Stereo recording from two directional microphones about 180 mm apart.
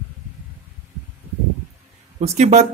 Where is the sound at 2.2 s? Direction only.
40° right (ahead or behind).